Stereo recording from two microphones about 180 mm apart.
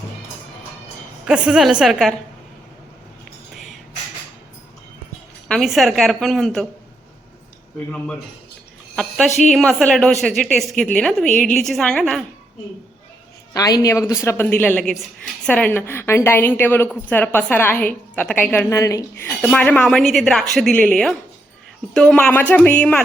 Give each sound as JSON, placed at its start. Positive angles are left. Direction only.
{"t": 1.3, "sound": "a woman's voice", "side_deg": -5}
{"t": 3.5, "sound": "a sound", "side_deg": 0}
{"t": 5.5, "sound": "a woman's voice", "side_deg": 0}
{"t": 9.0, "sound": "a woman's voice", "side_deg": 5}
{"t": 11.3, "sound": "a woman's voice", "side_deg": 45}
{"t": 11.6, "sound": "a woman's voice", "side_deg": 0}
{"t": 13.5, "sound": "a woman's voice", "side_deg": 20}
{"t": 19.3, "sound": "a woman's voice", "side_deg": 5}